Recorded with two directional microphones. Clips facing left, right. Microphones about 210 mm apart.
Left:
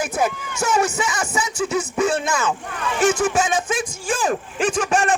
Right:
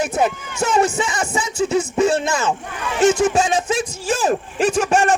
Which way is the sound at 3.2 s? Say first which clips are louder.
Right 3 dB; 30° right (ahead or behind).